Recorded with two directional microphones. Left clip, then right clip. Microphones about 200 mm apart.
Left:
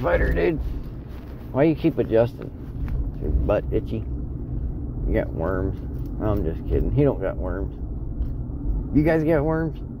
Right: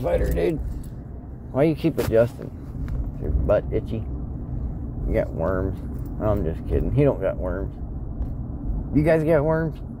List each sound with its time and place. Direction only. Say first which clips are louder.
0.0 s speech: left 1 dB; 15° right (ahead or behind)
3.4 s speech: right 2 dB; centre (ahead or behind)
5.1 s speech: right 1 dB; 5° right (ahead or behind)
8.9 s speech: right 1 dB; 5° right (ahead or behind)